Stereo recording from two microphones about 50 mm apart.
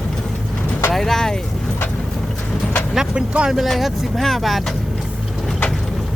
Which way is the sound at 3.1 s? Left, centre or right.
Right.